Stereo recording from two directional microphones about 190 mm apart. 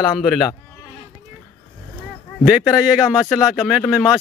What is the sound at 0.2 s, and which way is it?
Speech, centre (ahead or behind).